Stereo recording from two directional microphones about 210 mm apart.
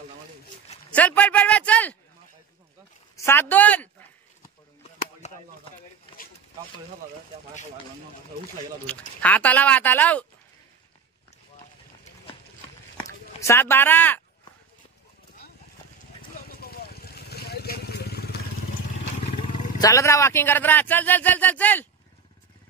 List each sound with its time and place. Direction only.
0.9 s speech: 5° left (ahead or behind)
3.2 s speech: 10° left (ahead or behind)
5.2 s a sound: 35° left (ahead or behind)
8.8 s speech: 5° left (ahead or behind)
13.4 s speech: 10° left (ahead or behind)
16.4 s vehicle: 45° left (ahead or behind)
19.8 s speech: 15° left (ahead or behind)